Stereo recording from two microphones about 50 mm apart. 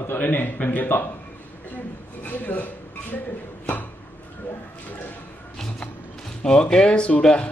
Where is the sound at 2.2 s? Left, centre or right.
Left.